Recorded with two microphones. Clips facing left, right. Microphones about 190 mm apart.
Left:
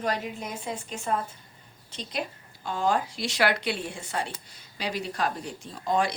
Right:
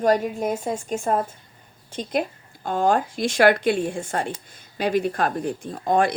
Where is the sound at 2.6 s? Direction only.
50° right (ahead or behind).